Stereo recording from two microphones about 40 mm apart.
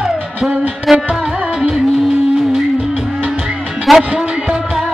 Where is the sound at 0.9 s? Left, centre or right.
Centre.